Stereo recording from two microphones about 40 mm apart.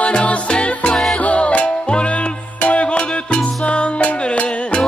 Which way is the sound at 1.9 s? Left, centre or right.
Left.